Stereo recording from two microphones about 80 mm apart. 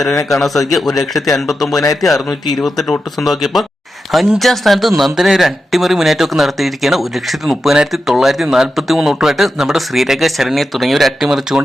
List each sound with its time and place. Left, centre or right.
0.0 s speech: centre
1.7 s a man's voice: left
2.0 s speech: centre